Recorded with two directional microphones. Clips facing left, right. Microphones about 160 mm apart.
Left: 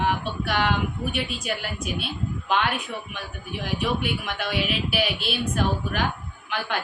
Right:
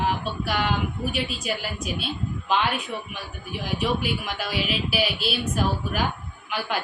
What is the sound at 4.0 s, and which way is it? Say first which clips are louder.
A man's voice: even; centre (ahead or behind).